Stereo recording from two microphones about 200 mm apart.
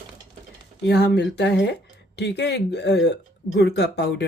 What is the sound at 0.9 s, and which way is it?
Speech, 55° left (ahead or behind).